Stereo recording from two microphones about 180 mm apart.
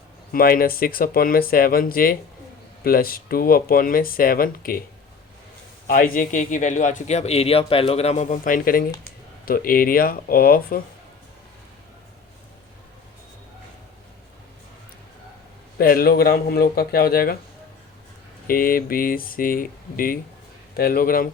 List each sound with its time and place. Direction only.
0.3 s a man's voice: 55° left (ahead or behind)
5.9 s a man's voice: 50° left (ahead or behind)
15.8 s speech: 55° left (ahead or behind)
18.4 s a man's voice: 50° left (ahead or behind)